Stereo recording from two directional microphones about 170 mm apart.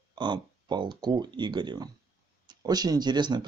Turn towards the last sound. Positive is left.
turn(degrees=-25)  # may be behind; listen again after turning